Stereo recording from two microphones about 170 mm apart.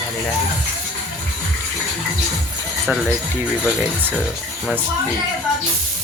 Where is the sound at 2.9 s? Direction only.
5° right (ahead or behind).